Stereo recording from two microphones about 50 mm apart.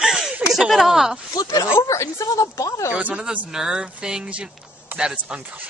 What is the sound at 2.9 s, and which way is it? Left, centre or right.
Speech, right.